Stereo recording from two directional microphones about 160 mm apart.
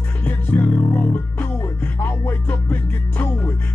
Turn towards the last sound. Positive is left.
turn(degrees=10)  # may be behind; listen again after turning